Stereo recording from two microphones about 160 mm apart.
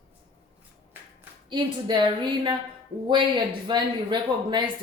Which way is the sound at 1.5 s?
30° right (ahead or behind).